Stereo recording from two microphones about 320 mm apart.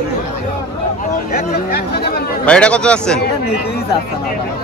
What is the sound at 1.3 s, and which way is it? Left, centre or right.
Speech, left.